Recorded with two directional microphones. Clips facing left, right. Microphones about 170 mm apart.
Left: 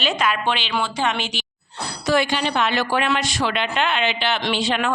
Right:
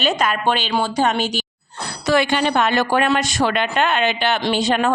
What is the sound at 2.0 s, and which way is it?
A woman's voice, 60° right (ahead or behind).